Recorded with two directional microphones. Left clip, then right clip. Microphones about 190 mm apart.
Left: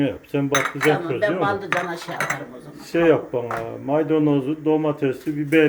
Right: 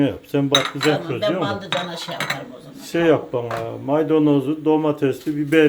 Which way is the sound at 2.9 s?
10° right (ahead or behind).